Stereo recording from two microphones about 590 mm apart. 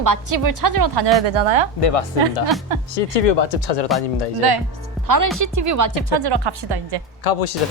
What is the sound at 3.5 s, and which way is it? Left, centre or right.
Speech, left.